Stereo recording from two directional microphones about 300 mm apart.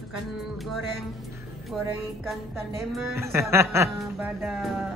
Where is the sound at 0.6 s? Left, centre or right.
Centre.